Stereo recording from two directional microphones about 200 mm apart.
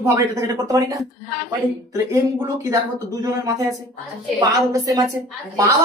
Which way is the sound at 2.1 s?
15° right (ahead or behind).